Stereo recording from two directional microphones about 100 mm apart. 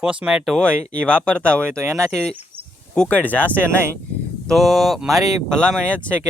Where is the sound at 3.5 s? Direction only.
25° right (ahead or behind).